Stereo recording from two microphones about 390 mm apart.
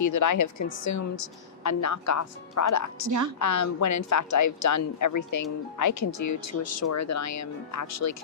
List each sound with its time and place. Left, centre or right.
0.0 s a woman's voice: left